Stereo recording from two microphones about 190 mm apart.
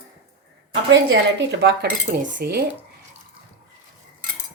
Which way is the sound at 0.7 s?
75° right (ahead or behind).